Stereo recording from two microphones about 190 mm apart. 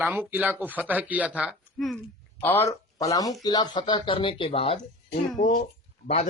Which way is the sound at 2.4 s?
10° left (ahead or behind).